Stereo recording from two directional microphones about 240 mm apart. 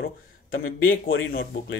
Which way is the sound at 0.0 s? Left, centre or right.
Left.